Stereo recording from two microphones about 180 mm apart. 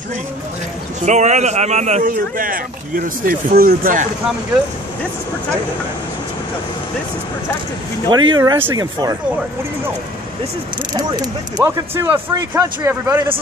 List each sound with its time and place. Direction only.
1.0 s a man's voice: 40° right (ahead or behind)
8.1 s speech: 20° right (ahead or behind)
10.9 s speech: 25° right (ahead or behind)